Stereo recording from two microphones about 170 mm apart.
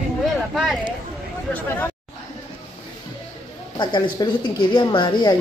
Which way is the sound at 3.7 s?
25° left (ahead or behind).